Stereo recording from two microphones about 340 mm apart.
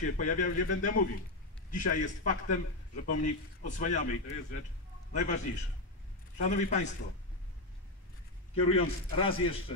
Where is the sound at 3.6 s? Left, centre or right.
Left.